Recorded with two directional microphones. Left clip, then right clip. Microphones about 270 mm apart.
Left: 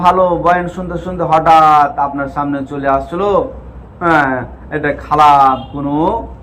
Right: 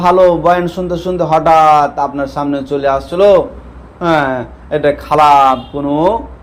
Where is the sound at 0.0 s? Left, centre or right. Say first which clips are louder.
Right 2 dB; right.